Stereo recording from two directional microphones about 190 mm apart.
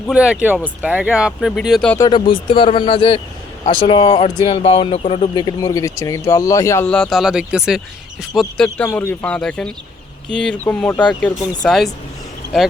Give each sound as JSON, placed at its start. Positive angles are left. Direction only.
{"t": 0.1, "sound": "speech", "side_deg": -5}
{"t": 2.0, "sound": "speech", "side_deg": 25}
{"t": 6.8, "sound": "speech", "side_deg": 5}